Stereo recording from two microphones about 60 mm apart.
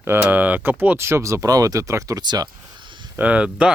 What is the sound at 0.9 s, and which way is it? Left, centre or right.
Speech, right.